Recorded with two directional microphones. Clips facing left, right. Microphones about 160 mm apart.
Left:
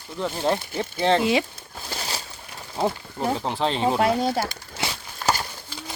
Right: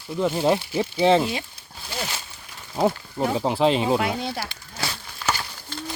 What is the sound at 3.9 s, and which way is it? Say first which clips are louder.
Speech: left 4 dB; 40° left (ahead or behind).